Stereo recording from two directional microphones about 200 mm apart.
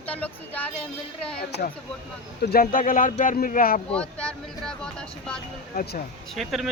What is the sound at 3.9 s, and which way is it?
Speech, 5° left (ahead or behind).